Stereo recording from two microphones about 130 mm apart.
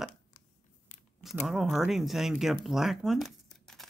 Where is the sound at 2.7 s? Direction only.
Centre (ahead or behind).